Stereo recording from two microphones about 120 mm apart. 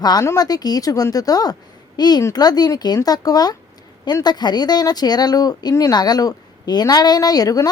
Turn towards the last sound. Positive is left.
turn(degrees=30)  # may be behind; listen again after turning